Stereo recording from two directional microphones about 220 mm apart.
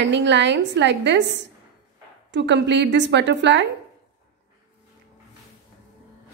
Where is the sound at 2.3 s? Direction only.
50° right (ahead or behind).